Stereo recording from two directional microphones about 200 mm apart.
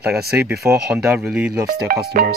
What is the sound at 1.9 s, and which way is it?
Speech, 50° right (ahead or behind).